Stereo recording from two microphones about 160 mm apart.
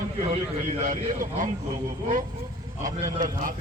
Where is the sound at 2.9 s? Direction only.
20° right (ahead or behind).